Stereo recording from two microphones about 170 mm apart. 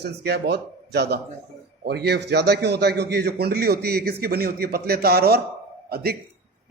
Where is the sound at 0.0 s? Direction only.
75° right (ahead or behind).